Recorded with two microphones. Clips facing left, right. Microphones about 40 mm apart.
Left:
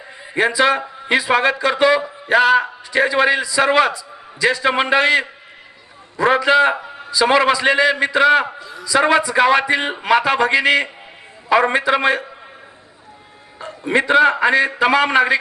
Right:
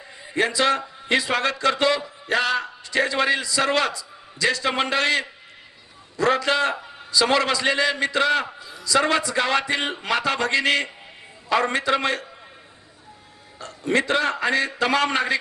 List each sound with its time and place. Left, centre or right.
0.3 s a man's voice: left
8.5 s a sound: centre
8.8 s a man's voice: left
13.6 s a man's voice: centre